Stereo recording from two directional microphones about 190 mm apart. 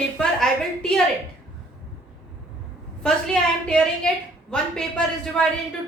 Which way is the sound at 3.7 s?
5° left (ahead or behind).